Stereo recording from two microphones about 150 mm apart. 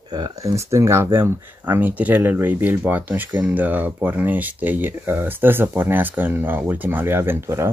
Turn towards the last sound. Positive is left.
turn(degrees=-15)  # may be behind; listen again after turning